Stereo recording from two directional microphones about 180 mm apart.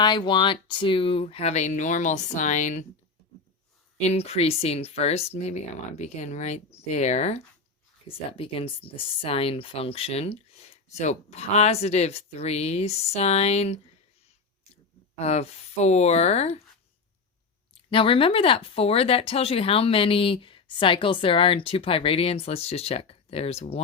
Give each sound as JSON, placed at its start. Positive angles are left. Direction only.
{"t": 0.0, "sound": "speech", "side_deg": 25}
{"t": 4.0, "sound": "speech", "side_deg": 35}
{"t": 15.2, "sound": "speech", "side_deg": 35}
{"t": 17.9, "sound": "speech", "side_deg": 30}